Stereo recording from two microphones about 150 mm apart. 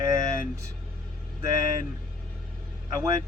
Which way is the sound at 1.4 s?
25° right (ahead or behind).